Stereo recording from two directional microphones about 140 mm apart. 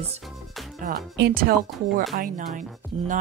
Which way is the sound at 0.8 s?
90° right.